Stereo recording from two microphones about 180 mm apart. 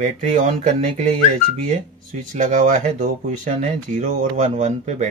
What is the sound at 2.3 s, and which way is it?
Speech, 45° right (ahead or behind).